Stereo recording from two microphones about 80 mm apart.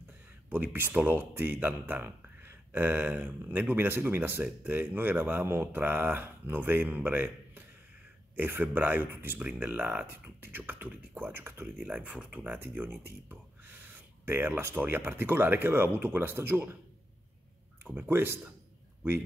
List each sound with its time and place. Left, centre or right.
0.5 s speech: right
11.8 s speech: centre
17.9 s speech: right